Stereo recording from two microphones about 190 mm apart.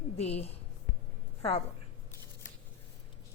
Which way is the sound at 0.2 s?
35° left (ahead or behind).